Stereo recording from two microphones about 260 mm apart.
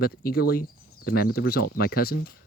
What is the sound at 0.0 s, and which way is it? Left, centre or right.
Speech, left.